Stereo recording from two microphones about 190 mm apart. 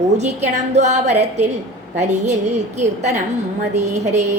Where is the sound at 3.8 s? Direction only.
40° right (ahead or behind).